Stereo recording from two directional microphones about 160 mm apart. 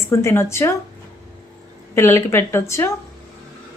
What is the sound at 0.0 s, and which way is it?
Speech, 20° left (ahead or behind).